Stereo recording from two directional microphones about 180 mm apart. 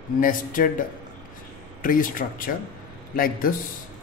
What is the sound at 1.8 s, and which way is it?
Speech, 50° left (ahead or behind).